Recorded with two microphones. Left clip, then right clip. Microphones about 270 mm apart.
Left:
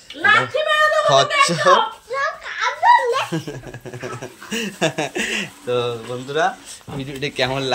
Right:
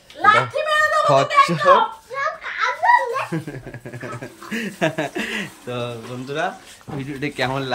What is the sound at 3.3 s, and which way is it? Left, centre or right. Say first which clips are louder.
Speech: left 2 dB; centre.